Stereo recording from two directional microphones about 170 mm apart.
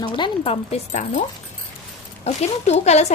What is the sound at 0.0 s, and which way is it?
Speech, 30° left (ahead or behind).